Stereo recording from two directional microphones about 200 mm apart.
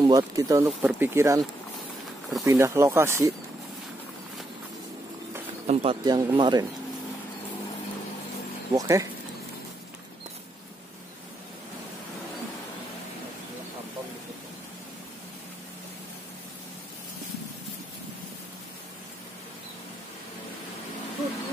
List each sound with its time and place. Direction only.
0.0 s speech: 15° right (ahead or behind)
2.4 s speech: 15° right (ahead or behind)
5.7 s speech: 30° right (ahead or behind)
6.0 s speech: 20° right (ahead or behind)
8.7 s speech: 15° right (ahead or behind)